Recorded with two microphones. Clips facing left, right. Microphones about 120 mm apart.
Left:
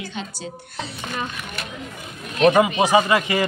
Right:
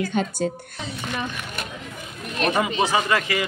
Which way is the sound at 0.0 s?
50° right (ahead or behind).